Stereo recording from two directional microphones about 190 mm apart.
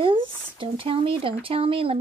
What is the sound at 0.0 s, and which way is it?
Speech, 25° right (ahead or behind).